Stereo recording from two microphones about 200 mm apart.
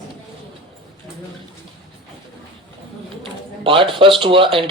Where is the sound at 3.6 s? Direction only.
25° right (ahead or behind).